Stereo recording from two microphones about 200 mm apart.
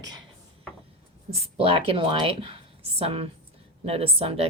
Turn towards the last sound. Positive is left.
turn(degrees=-30)  # may be behind; listen again after turning